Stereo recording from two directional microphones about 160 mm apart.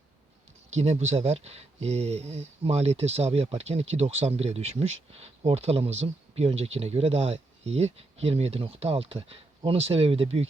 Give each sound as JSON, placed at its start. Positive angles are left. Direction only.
{"t": 0.7, "sound": "speech", "side_deg": -45}